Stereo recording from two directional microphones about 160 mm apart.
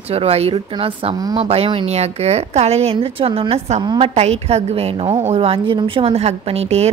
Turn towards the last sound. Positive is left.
turn(degrees=-40)  # may be behind; listen again after turning